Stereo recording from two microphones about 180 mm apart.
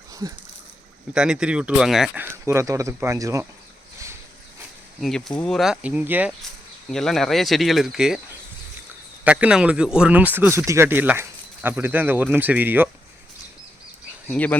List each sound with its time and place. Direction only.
0.1 s a sound: 20° right (ahead or behind)
1.1 s speech: 5° right (ahead or behind)
4.9 s speech: centre (ahead or behind)
6.9 s speech: centre (ahead or behind)
9.2 s speech: 5° right (ahead or behind)
14.3 s speech: 10° left (ahead or behind)